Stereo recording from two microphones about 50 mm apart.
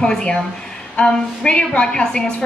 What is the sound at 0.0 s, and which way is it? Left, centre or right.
A woman's voice, centre.